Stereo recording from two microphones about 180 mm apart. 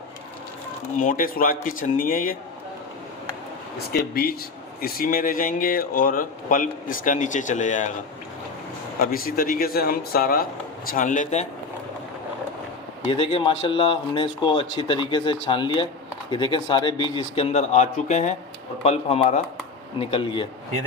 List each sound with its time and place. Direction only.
0.9 s speech: 50° left (ahead or behind)
3.9 s speech: 55° left (ahead or behind)
9.0 s speech: 55° left (ahead or behind)
13.1 s speech: 30° left (ahead or behind)